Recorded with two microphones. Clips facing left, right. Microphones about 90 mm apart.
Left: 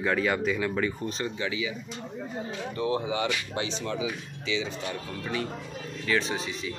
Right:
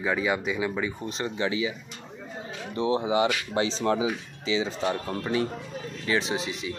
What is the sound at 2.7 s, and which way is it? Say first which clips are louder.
Speech: right 5 dB; 25° right (ahead or behind).